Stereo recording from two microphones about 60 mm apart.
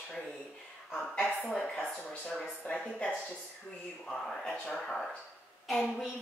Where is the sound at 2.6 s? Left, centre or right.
Left.